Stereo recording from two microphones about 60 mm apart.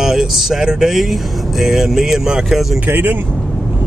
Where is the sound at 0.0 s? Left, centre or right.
Centre.